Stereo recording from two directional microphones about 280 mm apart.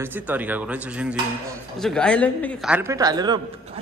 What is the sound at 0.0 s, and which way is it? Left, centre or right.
A man's voice, centre.